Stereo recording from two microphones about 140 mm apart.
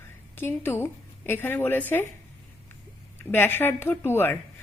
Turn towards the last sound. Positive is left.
turn(degrees=15)  # may be behind; listen again after turning